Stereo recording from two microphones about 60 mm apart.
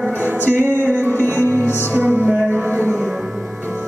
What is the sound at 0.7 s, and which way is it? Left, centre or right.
Music, right.